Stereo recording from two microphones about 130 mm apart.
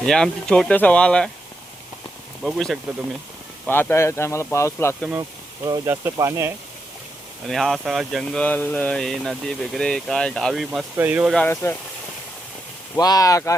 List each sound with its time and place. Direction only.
0.0 s speech: 5° left (ahead or behind)
2.4 s speech: centre (ahead or behind)
3.7 s speech: 15° left (ahead or behind)
5.6 s speech: 30° right (ahead or behind)
7.4 s speech: 5° left (ahead or behind)
10.9 s speech: 15° right (ahead or behind)
11.5 s speech: 20° left (ahead or behind)
13.0 s speech: 30° left (ahead or behind)